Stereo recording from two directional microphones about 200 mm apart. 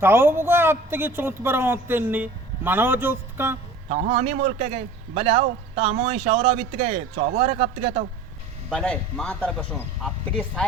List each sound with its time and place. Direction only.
0.0 s speech: 10° right (ahead or behind)
3.8 s a man's voice: 35° right (ahead or behind)
8.7 s speech: 5° left (ahead or behind)